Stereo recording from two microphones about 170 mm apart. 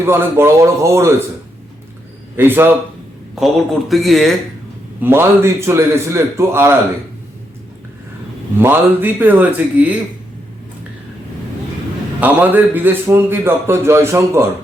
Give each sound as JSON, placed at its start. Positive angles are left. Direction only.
{"t": 0.0, "sound": "a man's voice", "side_deg": -15}
{"t": 2.3, "sound": "a man's voice", "side_deg": -15}
{"t": 3.3, "sound": "speech", "side_deg": 0}
{"t": 4.9, "sound": "a man's voice", "side_deg": -15}
{"t": 8.5, "sound": "a man's voice", "side_deg": -15}
{"t": 12.2, "sound": "a man's voice", "side_deg": -10}